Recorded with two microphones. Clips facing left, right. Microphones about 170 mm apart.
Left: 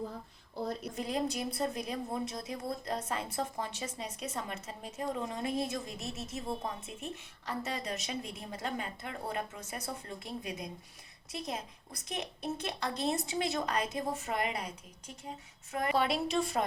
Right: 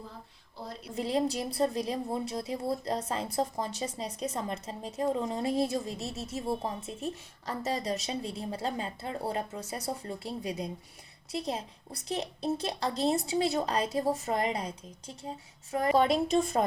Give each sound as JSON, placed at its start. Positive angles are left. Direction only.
{"t": 0.9, "sound": "a woman's voice", "side_deg": -30}